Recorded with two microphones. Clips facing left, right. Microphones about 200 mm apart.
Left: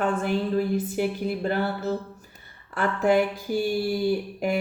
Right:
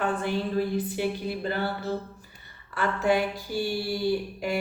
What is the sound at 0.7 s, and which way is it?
A woman's voice, 45° left (ahead or behind).